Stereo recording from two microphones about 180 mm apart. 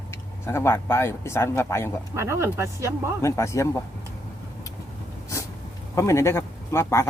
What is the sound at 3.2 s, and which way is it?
Speech, 15° left (ahead or behind).